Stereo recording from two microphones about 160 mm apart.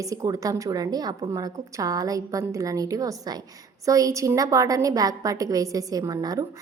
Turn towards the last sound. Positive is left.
turn(degrees=-20)  # may be behind; listen again after turning